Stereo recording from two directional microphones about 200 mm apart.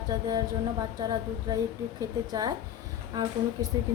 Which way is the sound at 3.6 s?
15° right (ahead or behind).